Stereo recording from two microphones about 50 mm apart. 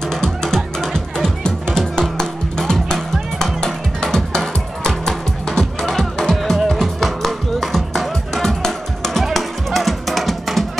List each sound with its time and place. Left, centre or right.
0.1 s music: centre